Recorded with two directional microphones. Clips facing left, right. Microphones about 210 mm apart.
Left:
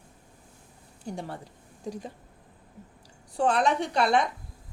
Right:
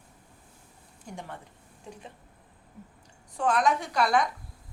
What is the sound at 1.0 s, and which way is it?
Speech, 35° left (ahead or behind).